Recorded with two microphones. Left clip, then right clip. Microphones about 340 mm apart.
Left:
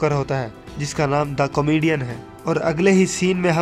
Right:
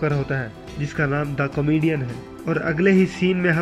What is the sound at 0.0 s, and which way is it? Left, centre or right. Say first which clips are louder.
Speech: left 3 dB; centre.